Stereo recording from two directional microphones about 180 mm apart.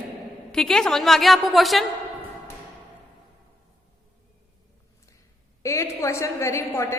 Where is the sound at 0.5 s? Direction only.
5° left (ahead or behind).